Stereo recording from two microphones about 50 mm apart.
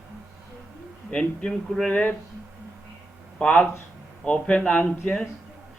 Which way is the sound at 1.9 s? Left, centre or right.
Left.